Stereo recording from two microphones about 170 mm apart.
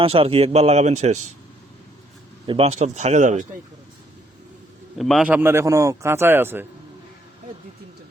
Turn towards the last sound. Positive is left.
turn(degrees=-10)  # may be behind; listen again after turning